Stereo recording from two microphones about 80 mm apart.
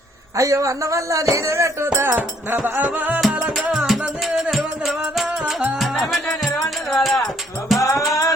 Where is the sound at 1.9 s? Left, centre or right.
Right.